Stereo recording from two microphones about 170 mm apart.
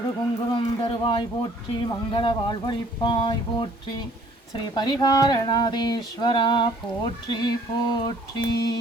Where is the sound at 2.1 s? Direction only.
30° left (ahead or behind).